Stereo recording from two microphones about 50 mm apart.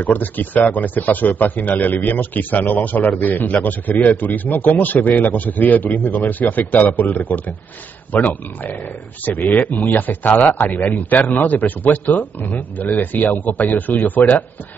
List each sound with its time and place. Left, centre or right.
0.0 s speech: left